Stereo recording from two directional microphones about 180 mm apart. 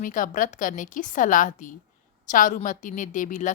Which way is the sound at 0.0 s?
50° left (ahead or behind).